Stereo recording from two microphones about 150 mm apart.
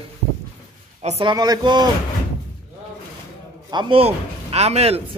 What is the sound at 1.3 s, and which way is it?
Speech, 25° right (ahead or behind).